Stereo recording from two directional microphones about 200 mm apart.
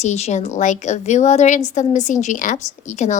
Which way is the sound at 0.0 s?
35° left (ahead or behind).